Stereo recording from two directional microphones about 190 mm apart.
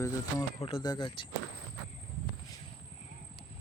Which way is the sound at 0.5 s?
30° left (ahead or behind).